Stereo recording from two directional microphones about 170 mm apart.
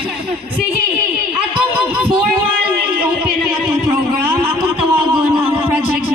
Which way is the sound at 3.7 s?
10° right (ahead or behind).